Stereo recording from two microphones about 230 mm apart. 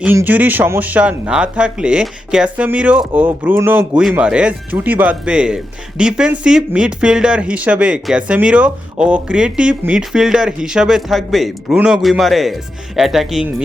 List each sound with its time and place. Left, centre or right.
0.0 s speech: centre